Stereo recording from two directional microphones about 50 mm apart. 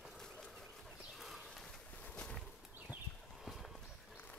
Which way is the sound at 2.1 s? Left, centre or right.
Centre.